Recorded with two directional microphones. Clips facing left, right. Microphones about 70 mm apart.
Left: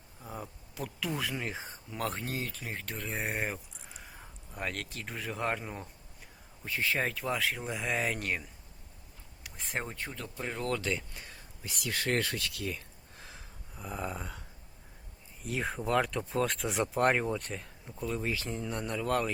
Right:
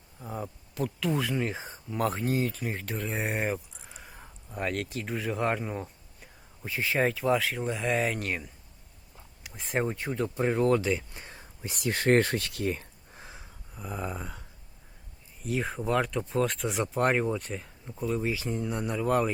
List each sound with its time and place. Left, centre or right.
0.2 s speech: centre; by 10.6 s right
10.6 s speech: centre
11.2 s speech: right
13.1 s a sound: centre
15.4 s speech: centre